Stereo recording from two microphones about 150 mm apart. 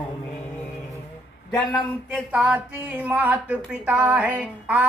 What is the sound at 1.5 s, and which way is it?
Speech, 25° left (ahead or behind).